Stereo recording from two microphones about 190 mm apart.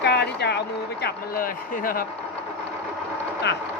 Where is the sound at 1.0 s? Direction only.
50° left (ahead or behind).